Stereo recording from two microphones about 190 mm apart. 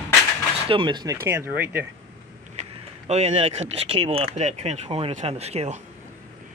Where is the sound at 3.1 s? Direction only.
35° right (ahead or behind).